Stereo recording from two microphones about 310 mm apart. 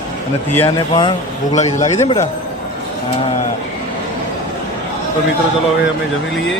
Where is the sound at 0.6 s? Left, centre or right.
Centre.